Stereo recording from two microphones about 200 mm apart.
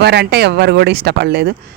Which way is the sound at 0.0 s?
55° right (ahead or behind).